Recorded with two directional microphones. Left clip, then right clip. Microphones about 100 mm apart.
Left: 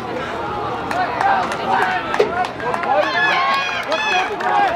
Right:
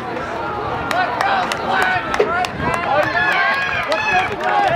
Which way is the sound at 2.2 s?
25° left (ahead or behind).